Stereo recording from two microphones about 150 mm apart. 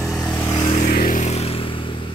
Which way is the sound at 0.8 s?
75° left (ahead or behind).